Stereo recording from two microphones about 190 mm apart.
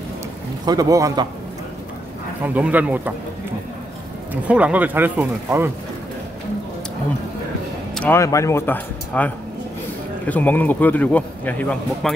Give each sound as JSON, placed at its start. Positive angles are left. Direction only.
{"t": 0.7, "sound": "a man's voice", "side_deg": -20}
{"t": 2.4, "sound": "speech", "side_deg": -10}
{"t": 4.3, "sound": "speech", "side_deg": -5}
{"t": 7.9, "sound": "a man's voice", "side_deg": 10}